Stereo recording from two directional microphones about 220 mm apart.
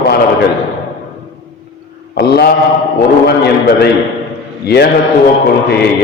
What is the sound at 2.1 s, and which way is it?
A man's voice, 45° left (ahead or behind).